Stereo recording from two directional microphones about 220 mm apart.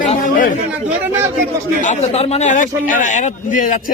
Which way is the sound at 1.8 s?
30° left (ahead or behind).